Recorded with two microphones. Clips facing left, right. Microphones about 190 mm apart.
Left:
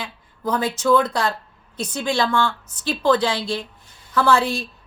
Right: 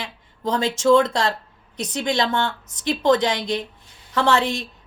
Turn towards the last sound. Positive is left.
turn(degrees=-20)  # may be behind; listen again after turning